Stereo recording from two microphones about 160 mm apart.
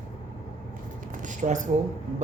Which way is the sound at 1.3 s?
50° right (ahead or behind).